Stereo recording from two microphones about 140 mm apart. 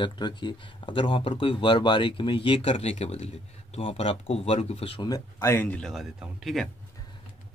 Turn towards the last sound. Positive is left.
turn(degrees=0)  # may be behind; listen again after turning